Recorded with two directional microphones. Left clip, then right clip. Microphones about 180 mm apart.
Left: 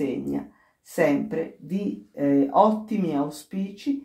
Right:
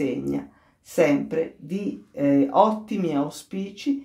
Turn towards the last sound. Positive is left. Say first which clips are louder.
# right 2 dB
turn(degrees=-30)  # may be behind; listen again after turning